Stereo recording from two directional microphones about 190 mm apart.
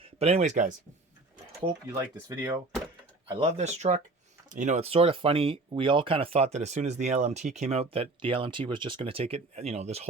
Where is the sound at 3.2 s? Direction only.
35° right (ahead or behind).